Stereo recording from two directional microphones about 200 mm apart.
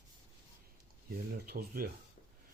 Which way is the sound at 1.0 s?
50° right (ahead or behind).